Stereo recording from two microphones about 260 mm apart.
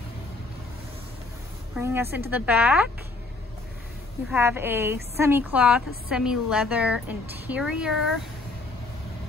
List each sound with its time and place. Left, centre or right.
1.8 s speech: centre
4.3 s a woman's voice: centre